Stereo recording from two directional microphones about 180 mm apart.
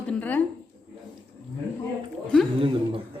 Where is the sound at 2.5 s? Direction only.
30° right (ahead or behind).